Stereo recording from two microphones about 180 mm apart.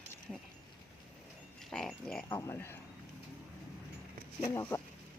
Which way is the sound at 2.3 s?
15° left (ahead or behind).